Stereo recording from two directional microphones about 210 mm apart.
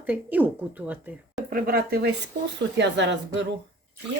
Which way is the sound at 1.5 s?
45° right (ahead or behind).